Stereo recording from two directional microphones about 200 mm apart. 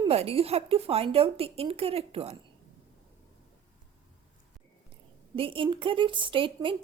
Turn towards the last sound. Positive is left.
turn(degrees=-25)  # may be behind; listen again after turning